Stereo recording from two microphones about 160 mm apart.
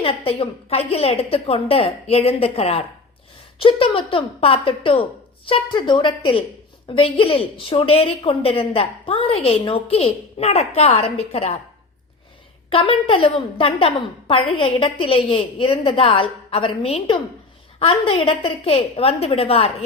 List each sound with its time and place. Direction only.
0.0 s a woman's voice: 35° left (ahead or behind)
12.7 s a woman's voice: 35° left (ahead or behind)